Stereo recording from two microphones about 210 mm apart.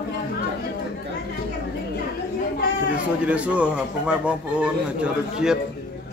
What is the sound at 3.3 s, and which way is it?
A man's voice, 5° right (ahead or behind).